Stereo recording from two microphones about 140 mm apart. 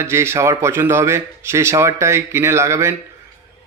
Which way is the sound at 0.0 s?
20° right (ahead or behind).